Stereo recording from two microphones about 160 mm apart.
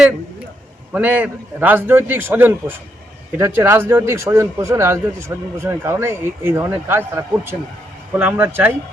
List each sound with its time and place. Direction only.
0.9 s speech: 10° right (ahead or behind)